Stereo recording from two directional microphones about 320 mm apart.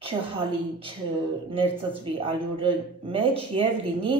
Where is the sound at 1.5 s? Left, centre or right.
Centre.